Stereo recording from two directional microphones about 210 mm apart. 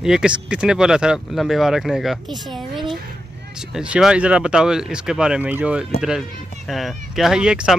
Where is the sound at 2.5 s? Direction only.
Centre (ahead or behind).